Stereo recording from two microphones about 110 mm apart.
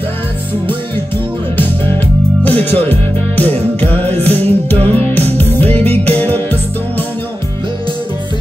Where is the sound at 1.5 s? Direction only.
20° left (ahead or behind).